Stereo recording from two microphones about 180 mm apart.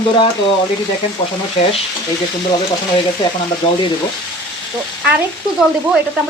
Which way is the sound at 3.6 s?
25° left (ahead or behind).